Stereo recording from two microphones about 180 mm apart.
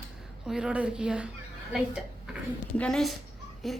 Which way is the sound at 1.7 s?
Centre (ahead or behind).